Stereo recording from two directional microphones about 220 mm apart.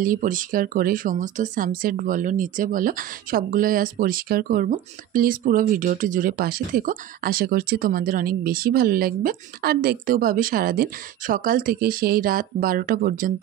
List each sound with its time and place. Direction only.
0.0 s speech: 35° right (ahead or behind)